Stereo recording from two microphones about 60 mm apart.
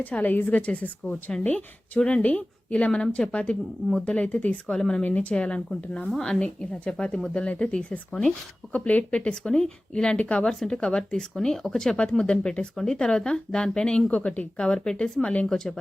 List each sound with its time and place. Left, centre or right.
0.1 s speech: left
4.7 s speech: centre
8.7 s speech: left; by 15.7 s centre